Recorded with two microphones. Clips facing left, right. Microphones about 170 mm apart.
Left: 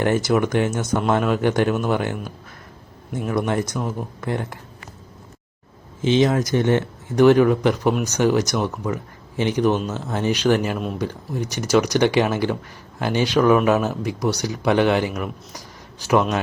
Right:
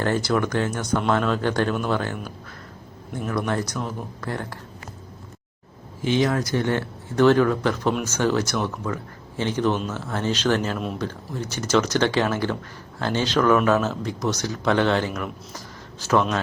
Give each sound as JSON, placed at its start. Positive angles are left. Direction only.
{"t": 0.0, "sound": "a man's voice", "side_deg": 15}
{"t": 3.3, "sound": "speech", "side_deg": 20}
{"t": 6.0, "sound": "a man's voice", "side_deg": 20}